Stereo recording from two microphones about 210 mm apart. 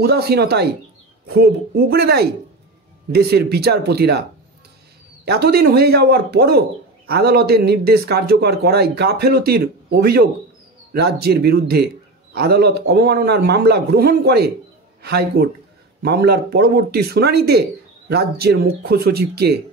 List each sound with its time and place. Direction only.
0.0 s speech: 50° right (ahead or behind)
5.2 s a man's voice: 50° right (ahead or behind)